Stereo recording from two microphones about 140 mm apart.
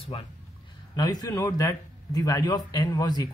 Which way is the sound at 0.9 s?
25° left (ahead or behind).